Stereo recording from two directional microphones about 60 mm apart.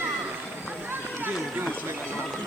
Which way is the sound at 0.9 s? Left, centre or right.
Right.